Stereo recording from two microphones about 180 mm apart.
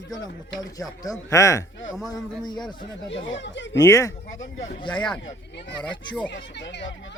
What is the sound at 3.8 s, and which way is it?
Speech, 20° left (ahead or behind).